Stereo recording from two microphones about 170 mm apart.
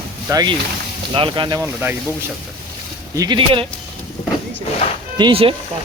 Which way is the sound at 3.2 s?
25° right (ahead or behind).